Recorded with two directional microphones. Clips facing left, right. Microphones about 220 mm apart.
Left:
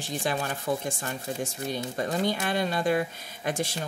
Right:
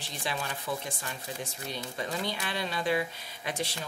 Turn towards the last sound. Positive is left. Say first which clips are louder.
# left 5 dB
turn(degrees=45)  # may be behind; listen again after turning